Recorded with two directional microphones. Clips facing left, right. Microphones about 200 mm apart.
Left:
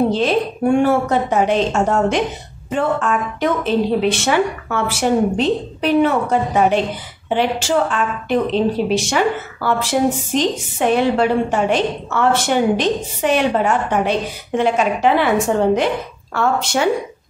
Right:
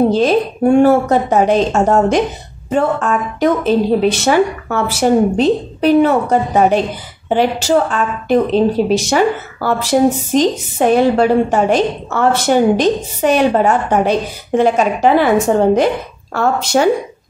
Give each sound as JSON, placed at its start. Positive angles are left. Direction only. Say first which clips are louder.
{"t": 0.1, "sound": "speech", "louder": "right 4 dB", "side_deg": -40}
{"t": 16.3, "sound": "speech", "louder": "right 4 dB", "side_deg": -40}